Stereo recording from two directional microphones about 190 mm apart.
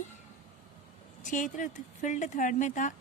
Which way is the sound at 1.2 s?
40° left (ahead or behind).